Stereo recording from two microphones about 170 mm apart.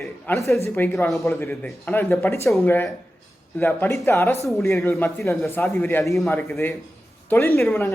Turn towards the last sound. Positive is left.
turn(degrees=10)  # may be behind; listen again after turning